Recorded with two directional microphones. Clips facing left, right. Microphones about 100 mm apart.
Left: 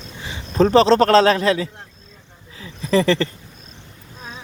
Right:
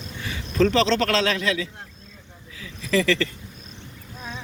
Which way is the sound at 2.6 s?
35° left (ahead or behind).